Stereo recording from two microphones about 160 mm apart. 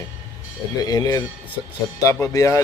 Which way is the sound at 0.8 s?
25° left (ahead or behind).